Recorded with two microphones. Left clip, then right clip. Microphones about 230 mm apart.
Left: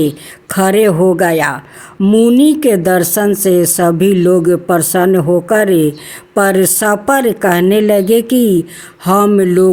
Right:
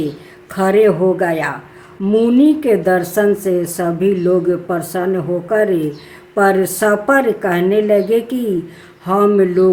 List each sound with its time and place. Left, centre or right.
0.4 s a woman's voice: left